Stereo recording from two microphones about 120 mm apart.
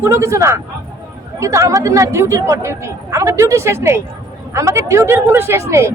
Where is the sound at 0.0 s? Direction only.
25° right (ahead or behind).